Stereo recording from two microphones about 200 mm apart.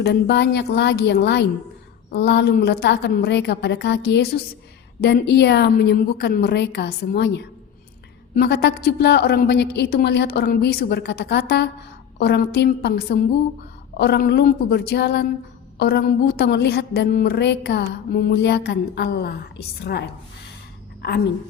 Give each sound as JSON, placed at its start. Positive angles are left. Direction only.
{"t": 0.0, "sound": "a woman's voice", "side_deg": 55}